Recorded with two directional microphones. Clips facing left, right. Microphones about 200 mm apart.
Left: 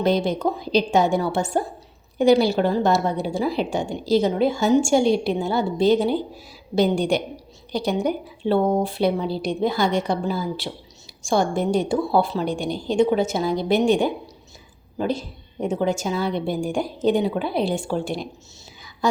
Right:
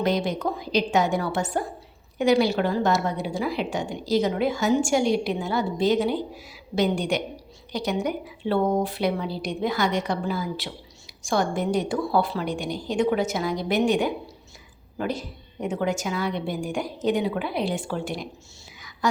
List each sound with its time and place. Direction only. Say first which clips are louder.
0.0 s a woman's voice: left 4 dB; 30° left (ahead or behind)